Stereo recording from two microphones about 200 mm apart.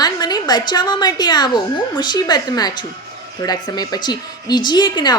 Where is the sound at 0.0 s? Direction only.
20° left (ahead or behind).